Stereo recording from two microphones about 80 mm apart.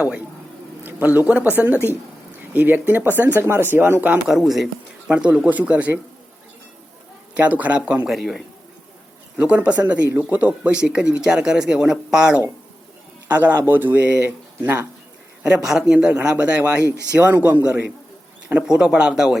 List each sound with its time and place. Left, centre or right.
0.9 s speech: right
4.3 s speech: centre
5.0 s speech: centre
7.3 s speech: centre
8.0 s speech: centre
9.4 s speech: centre
13.2 s speech: right
15.4 s speech: centre